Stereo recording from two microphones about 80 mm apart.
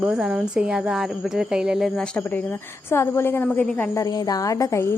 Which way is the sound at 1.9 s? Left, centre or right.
Centre.